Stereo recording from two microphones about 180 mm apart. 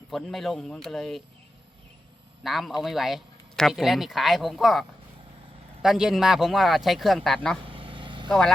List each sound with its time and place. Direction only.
0.1 s speech: centre (ahead or behind)
2.4 s speech: centre (ahead or behind)
7.6 s vehicle: 30° right (ahead or behind)
8.3 s speech: centre (ahead or behind)